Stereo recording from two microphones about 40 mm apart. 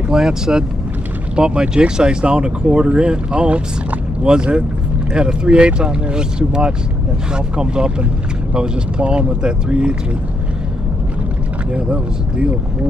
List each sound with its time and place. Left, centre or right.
0.1 s speech: centre
11.7 s speech: right